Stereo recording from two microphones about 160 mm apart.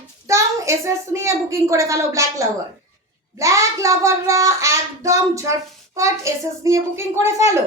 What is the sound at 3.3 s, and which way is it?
A woman's voice, 20° right (ahead or behind).